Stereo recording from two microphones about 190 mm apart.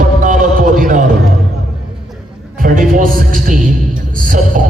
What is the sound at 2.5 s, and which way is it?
A man's voice, 45° right (ahead or behind).